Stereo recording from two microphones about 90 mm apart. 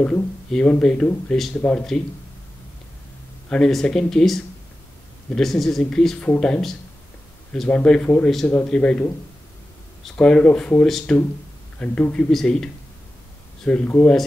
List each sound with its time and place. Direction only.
0.0 s speech: 10° left (ahead or behind)
3.4 s speech: 10° left (ahead or behind)
10.1 s speech: 10° left (ahead or behind)